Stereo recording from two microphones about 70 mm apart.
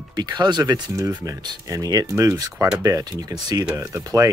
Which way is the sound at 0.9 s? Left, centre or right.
Right.